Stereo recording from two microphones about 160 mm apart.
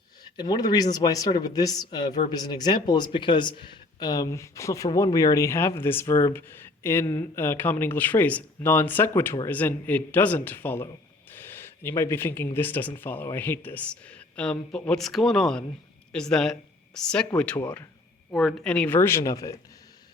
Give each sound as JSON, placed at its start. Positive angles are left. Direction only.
{"t": 0.3, "sound": "speech", "side_deg": 25}
{"t": 11.3, "sound": "gasp", "side_deg": 10}
{"t": 12.5, "sound": "speech", "side_deg": 10}